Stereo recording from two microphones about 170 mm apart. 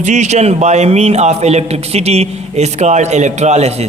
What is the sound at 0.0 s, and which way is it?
A man's voice, 45° right (ahead or behind).